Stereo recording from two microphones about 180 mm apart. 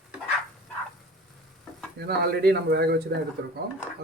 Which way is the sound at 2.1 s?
65° right (ahead or behind).